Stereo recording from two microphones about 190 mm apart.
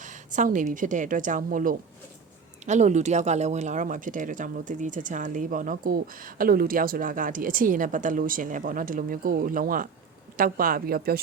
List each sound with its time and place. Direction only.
0.0 s speech: 40° right (ahead or behind)